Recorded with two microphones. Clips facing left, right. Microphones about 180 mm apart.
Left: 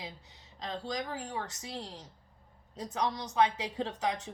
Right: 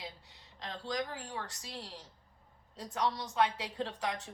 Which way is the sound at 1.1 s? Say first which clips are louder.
Left 4 dB; 45° left (ahead or behind).